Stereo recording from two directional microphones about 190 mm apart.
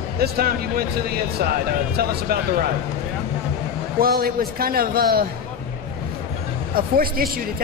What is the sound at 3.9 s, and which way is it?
Speech, 50° right (ahead or behind).